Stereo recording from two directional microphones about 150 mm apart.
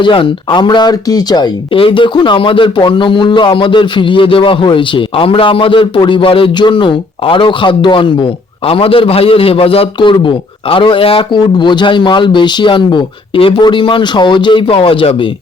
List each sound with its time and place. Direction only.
0.0 s speech: 35° left (ahead or behind)